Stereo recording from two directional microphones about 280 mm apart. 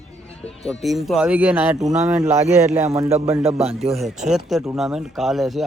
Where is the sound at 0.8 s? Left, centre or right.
Centre.